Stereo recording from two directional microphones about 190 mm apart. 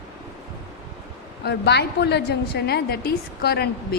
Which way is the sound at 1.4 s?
60° left (ahead or behind).